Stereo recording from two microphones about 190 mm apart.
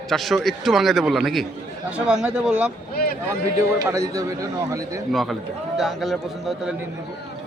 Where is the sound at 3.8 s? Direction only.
15° right (ahead or behind).